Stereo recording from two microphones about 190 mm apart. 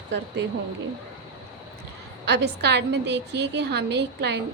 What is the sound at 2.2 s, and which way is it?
Speech, 60° right (ahead or behind).